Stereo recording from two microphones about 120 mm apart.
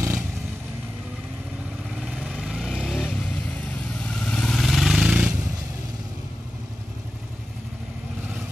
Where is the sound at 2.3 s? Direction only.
5° right (ahead or behind).